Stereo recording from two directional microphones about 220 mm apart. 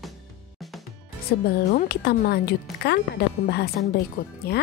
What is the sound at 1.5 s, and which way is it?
A woman's voice, 50° left (ahead or behind).